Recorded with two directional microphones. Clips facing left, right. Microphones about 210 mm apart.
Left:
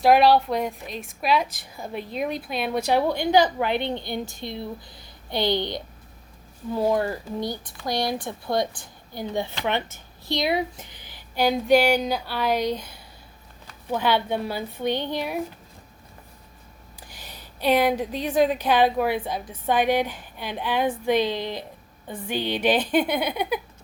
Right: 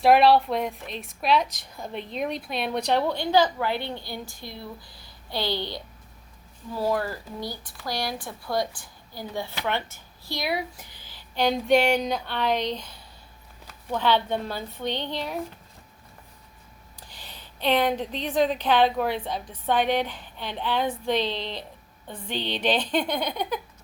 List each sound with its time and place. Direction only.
0.0 s a woman's voice: centre (ahead or behind)
17.1 s a woman's voice: 10° left (ahead or behind)